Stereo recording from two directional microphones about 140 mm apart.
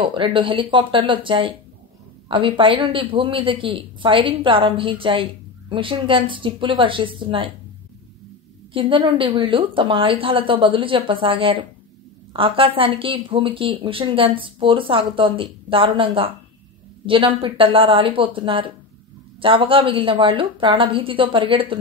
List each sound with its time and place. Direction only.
0.0 s a woman's voice: 35° right (ahead or behind)
8.7 s a woman's voice: 35° right (ahead or behind)